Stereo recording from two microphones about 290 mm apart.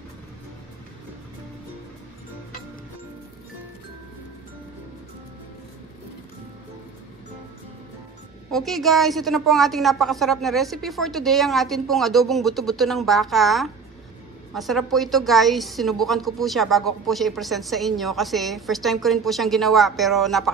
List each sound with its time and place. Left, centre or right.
8.5 s a woman's voice: centre